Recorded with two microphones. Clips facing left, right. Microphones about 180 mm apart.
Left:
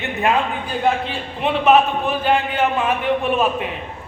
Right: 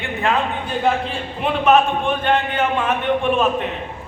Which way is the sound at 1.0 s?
Centre (ahead or behind).